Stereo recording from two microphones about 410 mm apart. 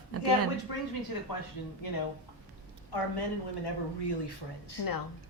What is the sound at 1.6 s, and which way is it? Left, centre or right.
Speech, left.